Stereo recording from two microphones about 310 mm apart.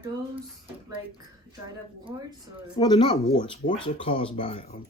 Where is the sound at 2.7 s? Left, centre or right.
Centre.